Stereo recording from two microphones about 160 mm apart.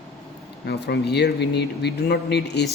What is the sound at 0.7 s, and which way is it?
Speech, 90° left.